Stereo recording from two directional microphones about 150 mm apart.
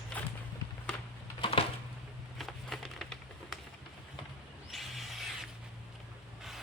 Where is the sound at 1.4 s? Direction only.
40° left (ahead or behind).